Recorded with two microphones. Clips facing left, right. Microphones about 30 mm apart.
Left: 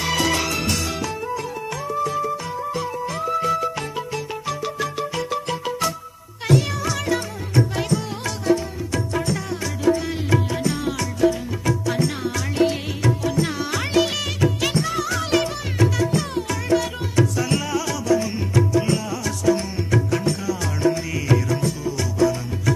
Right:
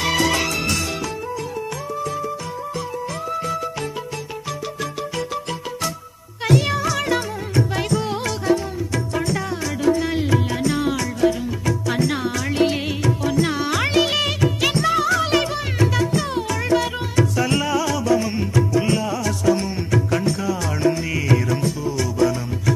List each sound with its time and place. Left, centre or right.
0.0 s music: centre
6.4 s music: right
7.7 s music of bollywood: centre
10.0 s music: centre